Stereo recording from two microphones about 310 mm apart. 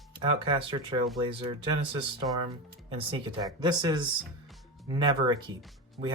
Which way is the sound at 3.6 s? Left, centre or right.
Centre.